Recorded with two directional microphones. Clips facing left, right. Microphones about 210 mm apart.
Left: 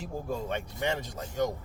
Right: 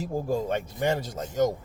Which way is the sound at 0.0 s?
40° right (ahead or behind).